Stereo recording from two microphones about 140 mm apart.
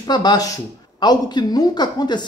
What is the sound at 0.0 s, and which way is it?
A man's voice, 30° left (ahead or behind).